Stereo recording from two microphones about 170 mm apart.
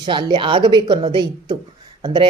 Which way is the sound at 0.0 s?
25° right (ahead or behind).